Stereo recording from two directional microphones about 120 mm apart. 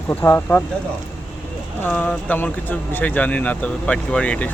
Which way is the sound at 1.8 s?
15° left (ahead or behind).